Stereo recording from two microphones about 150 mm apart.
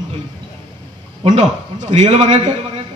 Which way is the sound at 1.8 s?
40° right (ahead or behind).